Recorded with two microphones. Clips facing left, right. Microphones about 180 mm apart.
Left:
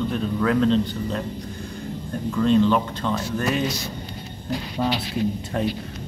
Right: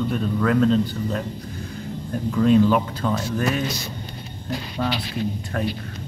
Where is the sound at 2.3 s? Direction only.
10° right (ahead or behind).